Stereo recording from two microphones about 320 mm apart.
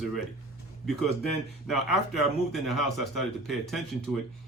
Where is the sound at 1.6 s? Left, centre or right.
Centre.